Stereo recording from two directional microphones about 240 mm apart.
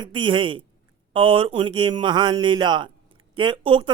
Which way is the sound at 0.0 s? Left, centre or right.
Centre.